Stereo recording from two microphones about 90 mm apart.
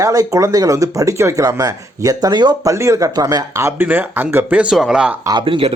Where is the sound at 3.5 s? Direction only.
30° right (ahead or behind).